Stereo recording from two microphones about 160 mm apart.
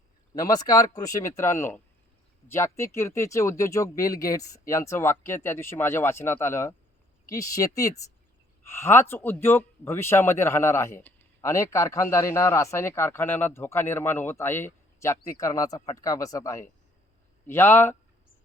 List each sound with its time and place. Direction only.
0.3 s speech: 25° left (ahead or behind)